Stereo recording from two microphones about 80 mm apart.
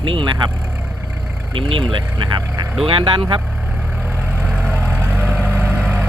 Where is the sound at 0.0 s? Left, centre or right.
Right.